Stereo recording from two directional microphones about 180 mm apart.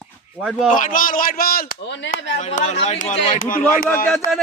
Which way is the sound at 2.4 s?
40° left (ahead or behind).